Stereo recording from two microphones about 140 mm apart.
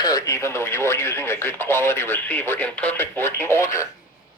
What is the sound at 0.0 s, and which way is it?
Speech, 25° left (ahead or behind).